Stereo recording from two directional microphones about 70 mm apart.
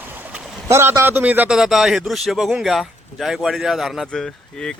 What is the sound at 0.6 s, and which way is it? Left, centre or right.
Speech, right.